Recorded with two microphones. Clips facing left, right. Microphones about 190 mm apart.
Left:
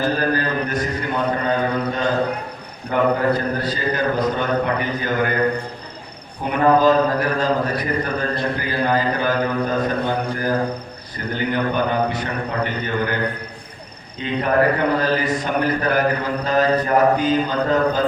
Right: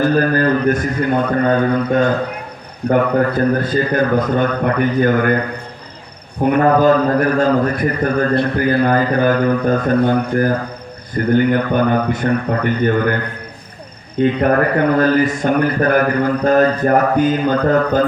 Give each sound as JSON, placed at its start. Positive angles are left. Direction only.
{"t": 0.2, "sound": "a man's voice", "side_deg": -50}
{"t": 6.4, "sound": "a man's voice", "side_deg": -50}
{"t": 11.1, "sound": "a man's voice", "side_deg": -50}
{"t": 14.2, "sound": "a man's voice", "side_deg": -50}